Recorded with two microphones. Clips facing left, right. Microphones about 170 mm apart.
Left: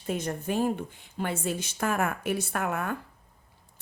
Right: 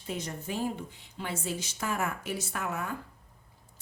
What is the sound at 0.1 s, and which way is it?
A woman's voice, 55° left (ahead or behind).